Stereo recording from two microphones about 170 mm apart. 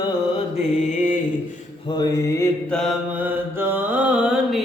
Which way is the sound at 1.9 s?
25° left (ahead or behind).